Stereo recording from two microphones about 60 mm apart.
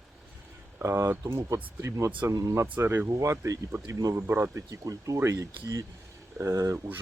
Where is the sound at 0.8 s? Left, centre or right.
Right.